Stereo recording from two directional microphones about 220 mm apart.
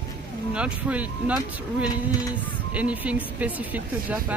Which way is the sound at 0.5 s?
5° right (ahead or behind).